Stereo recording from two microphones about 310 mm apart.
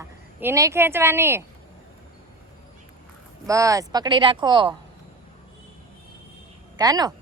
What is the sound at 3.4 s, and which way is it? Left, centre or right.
Speech, centre.